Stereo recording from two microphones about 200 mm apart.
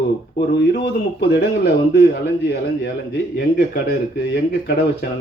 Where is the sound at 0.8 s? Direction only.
50° left (ahead or behind).